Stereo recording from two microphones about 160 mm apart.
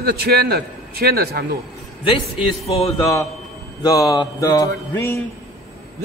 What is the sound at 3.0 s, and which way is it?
Mantra, 20° left (ahead or behind).